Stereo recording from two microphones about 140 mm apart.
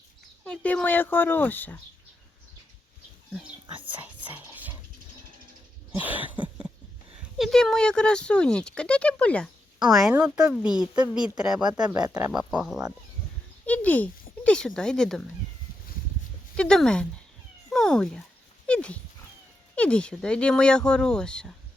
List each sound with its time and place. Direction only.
0.4 s speech: 10° left (ahead or behind)
3.9 s music: 10° right (ahead or behind)
5.9 s a sound: 10° right (ahead or behind)
7.3 s speech: centre (ahead or behind)
9.9 s speech: 5° right (ahead or behind)
11.9 s speech: 30° right (ahead or behind)
12.3 s speech: 5° right (ahead or behind)
13.7 s speech: 10° left (ahead or behind)
16.6 s speech: 5° left (ahead or behind)